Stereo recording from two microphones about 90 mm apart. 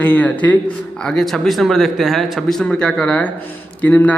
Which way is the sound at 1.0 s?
5° left (ahead or behind).